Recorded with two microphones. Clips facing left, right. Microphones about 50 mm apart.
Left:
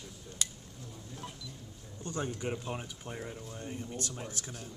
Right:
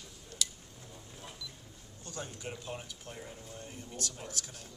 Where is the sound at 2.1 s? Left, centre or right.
Left.